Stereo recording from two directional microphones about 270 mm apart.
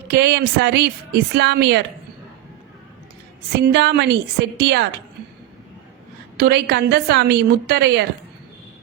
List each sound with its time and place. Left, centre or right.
0.1 s a woman's voice: right
3.6 s a woman's voice: right
6.3 s a woman's voice: right